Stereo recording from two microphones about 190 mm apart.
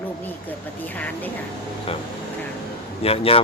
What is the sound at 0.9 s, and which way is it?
Speech, 10° left (ahead or behind).